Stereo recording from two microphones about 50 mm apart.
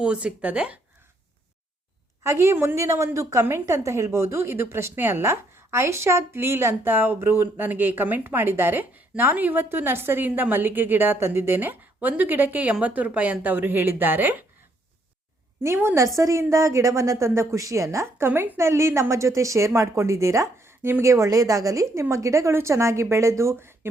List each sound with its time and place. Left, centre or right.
0.0 s speech: right
2.2 s a woman's voice: right
2.7 s a woman's voice: right
3.4 s a woman's voice: right
5.2 s a woman's voice: right
6.8 s a woman's voice: right
7.5 s a woman's voice: right
15.6 s a woman's voice: right
16.0 s a woman's voice: right
18.3 s a woman's voice: right
18.5 s a woman's voice: right
21.0 s a woman's voice: right
22.5 s a woman's voice: right